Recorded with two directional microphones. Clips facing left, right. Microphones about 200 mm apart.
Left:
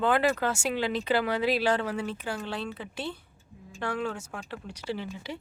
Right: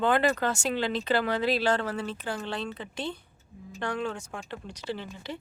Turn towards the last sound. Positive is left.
turn(degrees=10)  # may be behind; listen again after turning